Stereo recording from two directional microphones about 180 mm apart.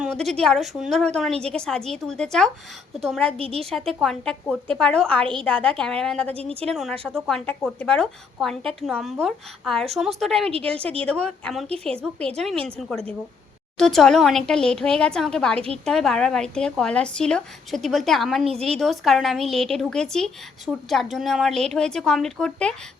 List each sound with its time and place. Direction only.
0.0 s speech: centre (ahead or behind)
3.3 s a woman's voice: 30° right (ahead or behind)
3.6 s speech: centre (ahead or behind)
6.3 s a woman's voice: 30° right (ahead or behind)
6.7 s speech: centre (ahead or behind)
10.5 s a woman's voice: 30° right (ahead or behind)
11.0 s speech: 5° left (ahead or behind)